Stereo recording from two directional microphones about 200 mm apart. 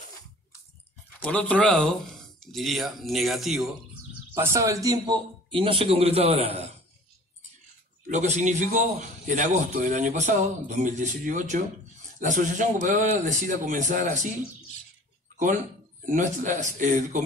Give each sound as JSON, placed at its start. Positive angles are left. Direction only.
{"t": 1.2, "sound": "speech", "side_deg": 5}
{"t": 4.4, "sound": "a man's voice", "side_deg": -15}
{"t": 8.1, "sound": "a man's voice", "side_deg": -35}
{"t": 15.3, "sound": "a man's voice", "side_deg": -40}